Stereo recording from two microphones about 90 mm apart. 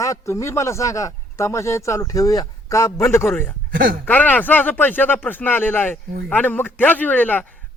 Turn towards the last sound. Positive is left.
turn(degrees=20)  # may be behind; listen again after turning